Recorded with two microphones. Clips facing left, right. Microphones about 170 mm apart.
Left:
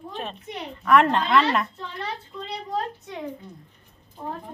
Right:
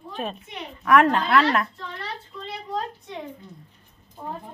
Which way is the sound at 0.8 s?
5° right (ahead or behind).